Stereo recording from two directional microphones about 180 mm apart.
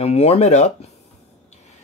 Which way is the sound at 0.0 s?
35° left (ahead or behind).